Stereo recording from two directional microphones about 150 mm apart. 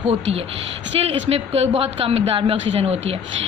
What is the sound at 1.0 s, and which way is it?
A woman's voice, 40° right (ahead or behind).